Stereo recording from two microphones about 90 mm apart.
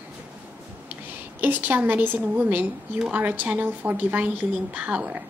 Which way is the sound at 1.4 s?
20° right (ahead or behind).